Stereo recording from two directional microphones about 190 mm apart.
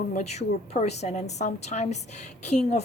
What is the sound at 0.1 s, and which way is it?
Speech, 35° left (ahead or behind).